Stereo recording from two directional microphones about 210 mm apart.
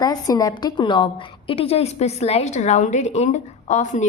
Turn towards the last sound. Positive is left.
turn(degrees=35)  # may be behind; listen again after turning